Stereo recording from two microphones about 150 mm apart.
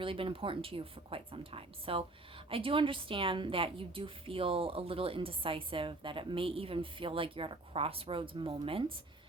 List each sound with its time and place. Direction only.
0.0 s a woman's voice: 35° right (ahead or behind)